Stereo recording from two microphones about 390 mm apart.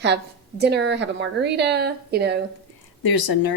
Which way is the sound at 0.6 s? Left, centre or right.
Right.